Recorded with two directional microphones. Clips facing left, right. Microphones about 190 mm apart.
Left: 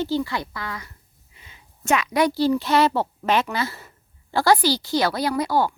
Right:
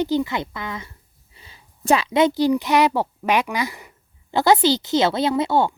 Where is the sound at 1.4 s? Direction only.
35° right (ahead or behind).